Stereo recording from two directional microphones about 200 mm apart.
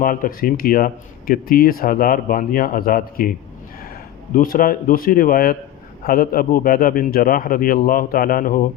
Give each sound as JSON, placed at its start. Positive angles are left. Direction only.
{"t": 0.0, "sound": "a man's voice", "side_deg": 45}
{"t": 4.4, "sound": "a man's voice", "side_deg": 45}